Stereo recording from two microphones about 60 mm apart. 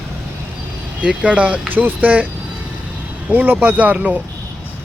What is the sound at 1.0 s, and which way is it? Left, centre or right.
Speech, right.